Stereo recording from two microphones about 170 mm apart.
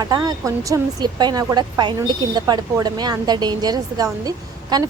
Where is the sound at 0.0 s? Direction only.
25° right (ahead or behind).